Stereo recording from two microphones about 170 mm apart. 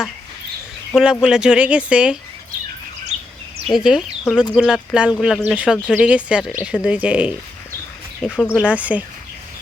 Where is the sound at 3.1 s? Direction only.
45° right (ahead or behind).